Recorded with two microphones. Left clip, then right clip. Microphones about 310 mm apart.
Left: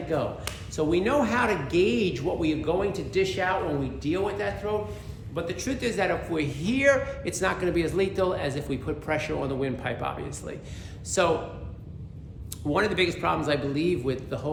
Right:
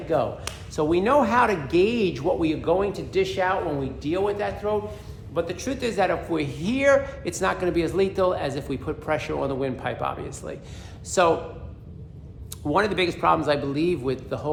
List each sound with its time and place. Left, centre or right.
0.1 s a man's voice: centre
12.6 s a man's voice: centre